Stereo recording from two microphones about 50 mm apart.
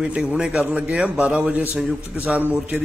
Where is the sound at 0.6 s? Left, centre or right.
Right.